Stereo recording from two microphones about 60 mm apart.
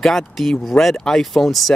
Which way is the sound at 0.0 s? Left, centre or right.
Centre.